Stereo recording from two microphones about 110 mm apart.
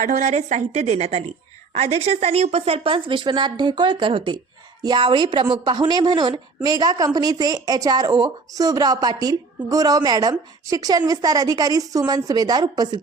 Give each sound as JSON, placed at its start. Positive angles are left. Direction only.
{"t": 0.2, "sound": "a woman's voice", "side_deg": -90}